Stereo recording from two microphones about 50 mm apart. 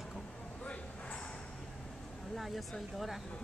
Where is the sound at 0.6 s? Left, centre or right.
Left.